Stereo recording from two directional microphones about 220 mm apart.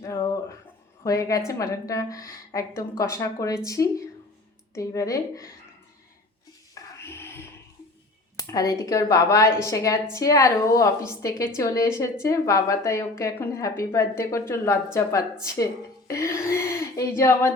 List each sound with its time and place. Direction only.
0.0 s music: 15° left (ahead or behind)
1.0 s a woman's voice: 15° left (ahead or behind)
6.7 s music: 10° left (ahead or behind)
8.4 s a woman's voice: 15° left (ahead or behind)
16.0 s speech: 15° left (ahead or behind)